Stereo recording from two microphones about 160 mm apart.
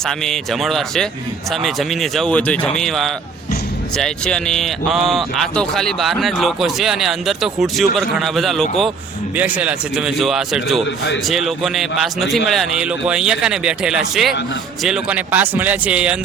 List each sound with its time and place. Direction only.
0.0 s a man's voice: 5° left (ahead or behind)